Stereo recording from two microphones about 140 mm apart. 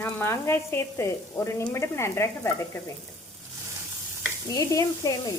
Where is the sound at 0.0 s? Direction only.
15° left (ahead or behind).